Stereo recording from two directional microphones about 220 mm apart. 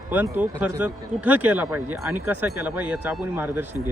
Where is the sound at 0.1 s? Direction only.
10° right (ahead or behind).